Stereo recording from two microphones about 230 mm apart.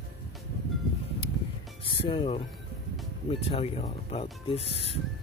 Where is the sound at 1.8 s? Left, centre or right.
Left.